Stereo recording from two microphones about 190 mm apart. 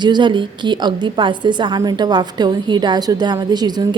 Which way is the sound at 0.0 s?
25° right (ahead or behind).